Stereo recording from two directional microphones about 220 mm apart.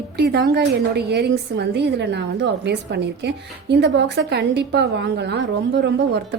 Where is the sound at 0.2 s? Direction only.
45° right (ahead or behind).